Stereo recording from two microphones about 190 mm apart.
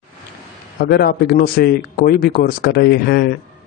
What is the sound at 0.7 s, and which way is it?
A man's voice, 55° left (ahead or behind).